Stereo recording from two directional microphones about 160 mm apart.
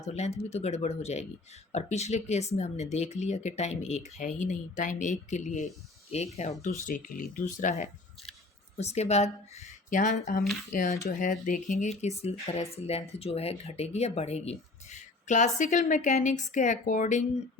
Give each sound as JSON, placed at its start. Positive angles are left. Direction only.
{"t": 0.1, "sound": "speech", "side_deg": 45}
{"t": 6.8, "sound": "speech", "side_deg": 55}
{"t": 11.8, "sound": "speech", "side_deg": 45}